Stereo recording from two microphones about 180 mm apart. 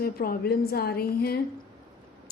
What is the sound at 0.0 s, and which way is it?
A woman's voice, 55° left (ahead or behind).